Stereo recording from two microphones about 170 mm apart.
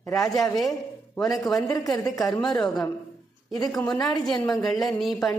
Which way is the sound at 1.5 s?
20° left (ahead or behind).